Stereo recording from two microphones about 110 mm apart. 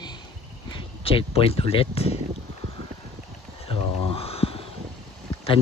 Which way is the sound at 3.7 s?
60° left (ahead or behind).